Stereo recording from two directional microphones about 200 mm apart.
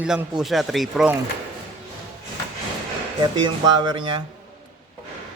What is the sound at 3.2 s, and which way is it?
Speech, 20° right (ahead or behind).